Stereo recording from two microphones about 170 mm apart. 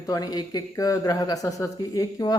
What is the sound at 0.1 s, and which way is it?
Speech, 20° left (ahead or behind).